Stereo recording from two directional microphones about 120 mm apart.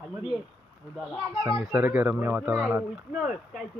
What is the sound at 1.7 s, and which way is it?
Speech, 15° right (ahead or behind).